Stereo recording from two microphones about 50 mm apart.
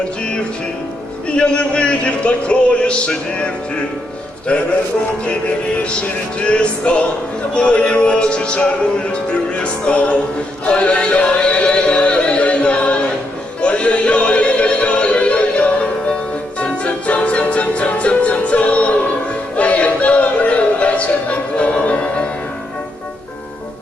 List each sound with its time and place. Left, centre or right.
1.4 s music: centre
6.0 s music: left